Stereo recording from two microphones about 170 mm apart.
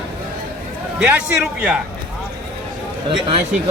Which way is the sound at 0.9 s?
10° right (ahead or behind).